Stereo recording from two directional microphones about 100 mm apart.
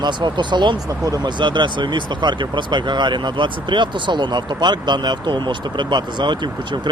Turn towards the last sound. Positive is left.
turn(degrees=-50)  # may be behind; listen again after turning